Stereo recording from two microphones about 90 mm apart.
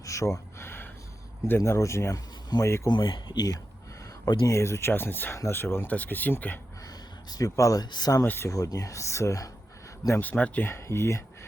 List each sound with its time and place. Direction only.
0.0 s a sound: 35° left (ahead or behind)
0.6 s a sound: 25° left (ahead or behind)
1.5 s speech: 30° left (ahead or behind)
2.1 s speech: 45° left (ahead or behind)
4.4 s speech: 35° left (ahead or behind)
6.8 s a sound: 45° left (ahead or behind)
7.9 s speech: 50° left (ahead or behind)
8.2 s speech: 30° left (ahead or behind)
8.5 s speech: 40° left (ahead or behind)
10.2 s speech: 15° left (ahead or behind)